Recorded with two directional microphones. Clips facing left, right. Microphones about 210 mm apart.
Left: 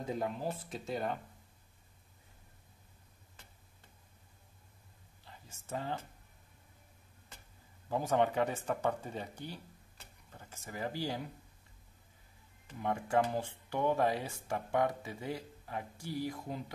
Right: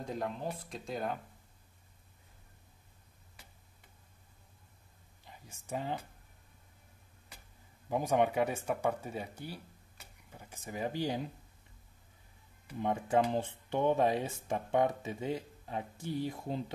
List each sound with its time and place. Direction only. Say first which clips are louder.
0.0 s speech: left 1 dB; 5° left (ahead or behind)
5.2 s speech: right 2 dB; 15° right (ahead or behind)
7.9 s speech: right 1 dB; 15° right (ahead or behind)
12.8 s speech: right 2 dB; 20° right (ahead or behind)